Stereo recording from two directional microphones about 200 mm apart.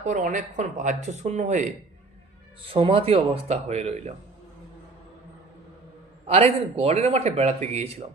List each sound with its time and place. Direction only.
0.0 s speech: 40° right (ahead or behind)
6.2 s speech: 30° right (ahead or behind)